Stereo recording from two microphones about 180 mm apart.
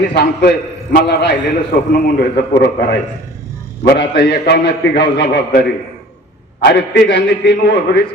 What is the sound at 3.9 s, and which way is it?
A man's voice, 65° left (ahead or behind).